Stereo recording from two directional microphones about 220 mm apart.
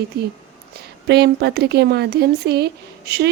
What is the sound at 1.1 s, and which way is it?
Speech, 50° right (ahead or behind).